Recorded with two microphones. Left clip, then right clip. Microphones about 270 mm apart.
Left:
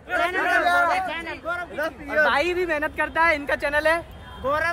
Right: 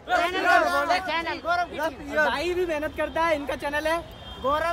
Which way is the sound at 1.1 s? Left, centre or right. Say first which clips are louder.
Right 3 dB; right.